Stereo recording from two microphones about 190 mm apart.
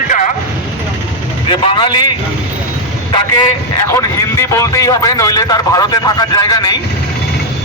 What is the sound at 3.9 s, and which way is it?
Speech, 15° left (ahead or behind).